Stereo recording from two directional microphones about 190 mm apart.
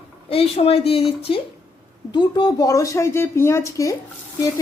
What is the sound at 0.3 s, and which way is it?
Speech, 30° left (ahead or behind).